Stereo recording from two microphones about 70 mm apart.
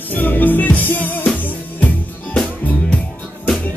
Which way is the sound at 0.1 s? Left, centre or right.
Left.